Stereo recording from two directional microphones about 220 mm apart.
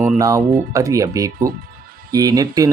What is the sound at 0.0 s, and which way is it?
Speech, 15° right (ahead or behind).